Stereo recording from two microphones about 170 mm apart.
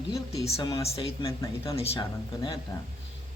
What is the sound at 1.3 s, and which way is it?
Speech, 15° left (ahead or behind).